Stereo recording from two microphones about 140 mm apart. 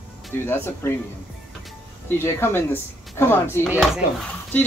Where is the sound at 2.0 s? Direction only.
15° left (ahead or behind).